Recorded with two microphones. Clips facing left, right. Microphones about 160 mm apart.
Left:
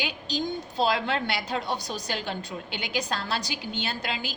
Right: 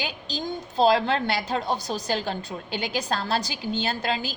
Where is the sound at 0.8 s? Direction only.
40° right (ahead or behind).